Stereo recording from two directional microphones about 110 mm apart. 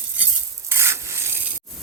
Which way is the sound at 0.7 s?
25° right (ahead or behind).